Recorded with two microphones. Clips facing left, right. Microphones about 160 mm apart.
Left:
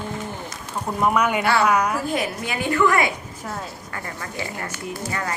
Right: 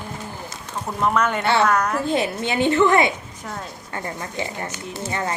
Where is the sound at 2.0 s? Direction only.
25° right (ahead or behind).